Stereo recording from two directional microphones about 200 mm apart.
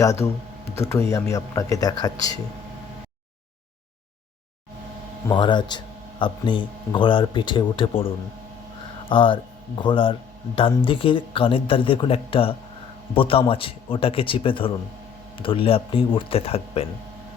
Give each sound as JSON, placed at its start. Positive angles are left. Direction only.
{"t": 0.0, "sound": "speech", "side_deg": 15}
{"t": 5.3, "sound": "speech", "side_deg": 20}